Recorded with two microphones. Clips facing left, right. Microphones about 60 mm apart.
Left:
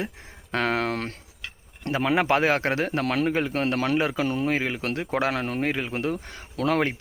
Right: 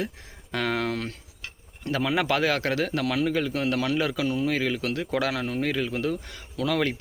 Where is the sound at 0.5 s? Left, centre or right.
Left.